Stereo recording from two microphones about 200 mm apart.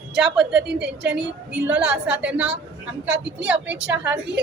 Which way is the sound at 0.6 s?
60° right (ahead or behind).